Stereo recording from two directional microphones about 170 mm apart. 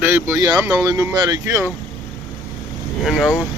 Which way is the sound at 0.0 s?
10° right (ahead or behind).